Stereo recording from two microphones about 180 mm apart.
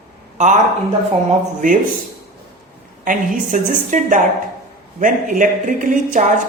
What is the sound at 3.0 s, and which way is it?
A woman's voice, 45° right (ahead or behind).